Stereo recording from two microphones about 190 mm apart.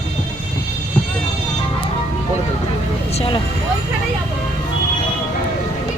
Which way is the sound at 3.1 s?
30° left (ahead or behind).